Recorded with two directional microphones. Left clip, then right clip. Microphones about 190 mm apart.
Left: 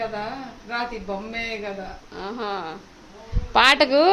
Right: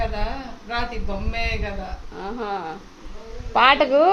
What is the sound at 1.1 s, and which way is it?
Speech, 15° left (ahead or behind).